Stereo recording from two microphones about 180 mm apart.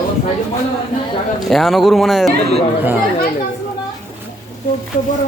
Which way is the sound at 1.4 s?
Centre (ahead or behind).